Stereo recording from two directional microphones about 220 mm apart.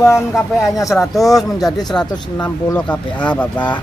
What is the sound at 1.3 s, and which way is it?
Speech, centre (ahead or behind).